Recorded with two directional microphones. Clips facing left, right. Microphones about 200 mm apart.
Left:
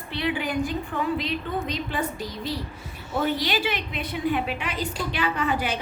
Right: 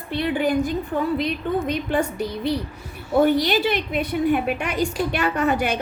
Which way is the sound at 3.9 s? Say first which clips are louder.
Right 5 dB; 50° right (ahead or behind).